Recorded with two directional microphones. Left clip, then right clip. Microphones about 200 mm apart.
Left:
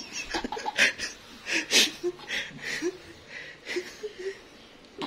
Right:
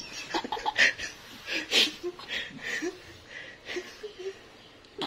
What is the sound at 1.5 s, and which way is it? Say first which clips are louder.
Wheeze: left 2 dB; 30° left (ahead or behind).